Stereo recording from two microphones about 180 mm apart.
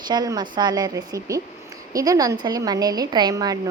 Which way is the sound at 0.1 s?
25° right (ahead or behind).